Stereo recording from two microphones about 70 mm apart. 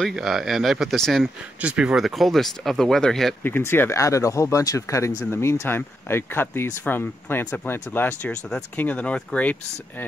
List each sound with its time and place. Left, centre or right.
0.1 s speech: centre
1.6 s speech: centre
3.4 s speech: left
3.9 s speech: left
8.3 s speech: centre
8.7 s speech: left